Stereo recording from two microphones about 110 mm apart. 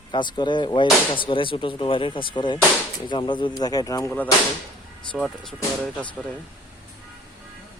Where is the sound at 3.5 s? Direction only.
35° left (ahead or behind).